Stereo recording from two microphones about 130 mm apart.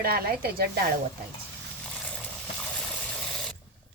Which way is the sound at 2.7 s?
5° left (ahead or behind).